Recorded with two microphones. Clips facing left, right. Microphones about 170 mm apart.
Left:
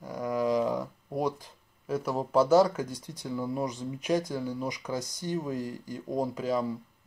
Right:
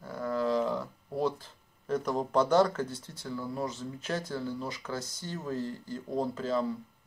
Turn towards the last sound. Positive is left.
turn(degrees=10)  # may be behind; listen again after turning